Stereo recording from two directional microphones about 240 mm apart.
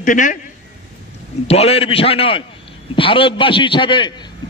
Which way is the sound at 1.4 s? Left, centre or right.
Left.